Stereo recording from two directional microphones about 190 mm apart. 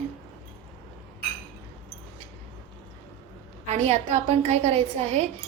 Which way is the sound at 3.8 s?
35° right (ahead or behind).